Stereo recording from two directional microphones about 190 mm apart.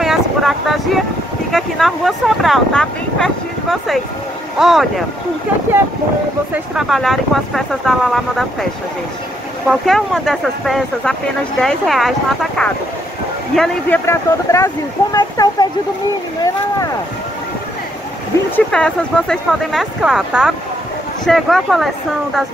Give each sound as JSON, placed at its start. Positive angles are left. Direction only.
{"t": 0.0, "sound": "speech", "side_deg": 0}
{"t": 6.5, "sound": "speech", "side_deg": 0}
{"t": 9.7, "sound": "speech", "side_deg": 0}
{"t": 18.3, "sound": "speech", "side_deg": 15}
{"t": 18.7, "sound": "speech", "side_deg": 5}